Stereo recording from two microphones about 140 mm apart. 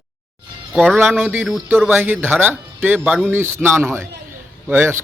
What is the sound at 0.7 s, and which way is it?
A man's voice, 5° left (ahead or behind).